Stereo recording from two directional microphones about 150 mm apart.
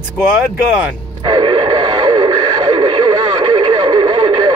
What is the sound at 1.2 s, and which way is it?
Radio, 30° right (ahead or behind).